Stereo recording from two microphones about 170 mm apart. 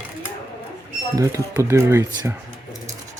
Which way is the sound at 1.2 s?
15° right (ahead or behind).